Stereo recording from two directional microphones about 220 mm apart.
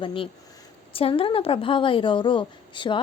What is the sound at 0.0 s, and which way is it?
Speech, 25° left (ahead or behind).